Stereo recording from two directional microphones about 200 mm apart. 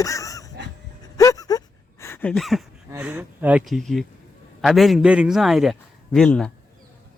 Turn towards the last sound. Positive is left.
turn(degrees=5)  # may be behind; listen again after turning